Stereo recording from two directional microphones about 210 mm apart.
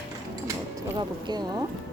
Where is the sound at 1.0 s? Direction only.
20° right (ahead or behind).